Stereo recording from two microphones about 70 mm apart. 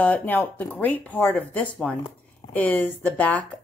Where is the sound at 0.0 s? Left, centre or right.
Left.